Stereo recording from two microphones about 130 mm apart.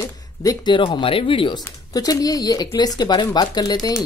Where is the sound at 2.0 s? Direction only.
30° left (ahead or behind).